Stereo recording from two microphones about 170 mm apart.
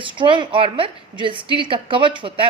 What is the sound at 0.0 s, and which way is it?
A woman's voice, 30° right (ahead or behind).